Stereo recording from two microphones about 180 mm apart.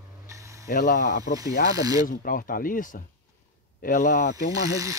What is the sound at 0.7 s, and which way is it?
Speech, 50° left (ahead or behind).